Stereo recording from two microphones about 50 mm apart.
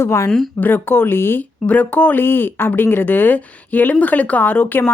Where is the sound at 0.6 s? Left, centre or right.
Left.